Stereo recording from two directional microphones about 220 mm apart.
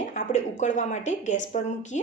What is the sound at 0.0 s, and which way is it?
A woman's voice, 35° left (ahead or behind).